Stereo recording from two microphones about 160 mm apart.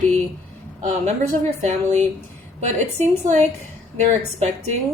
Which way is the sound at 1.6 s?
50° right (ahead or behind).